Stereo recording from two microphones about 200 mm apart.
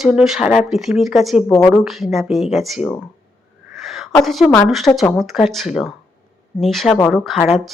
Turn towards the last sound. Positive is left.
turn(degrees=0)  # may be behind; listen again after turning